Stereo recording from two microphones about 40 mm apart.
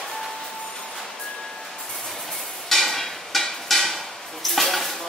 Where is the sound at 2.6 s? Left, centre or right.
Centre.